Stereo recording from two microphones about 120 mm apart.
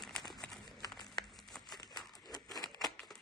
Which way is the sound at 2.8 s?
Centre (ahead or behind).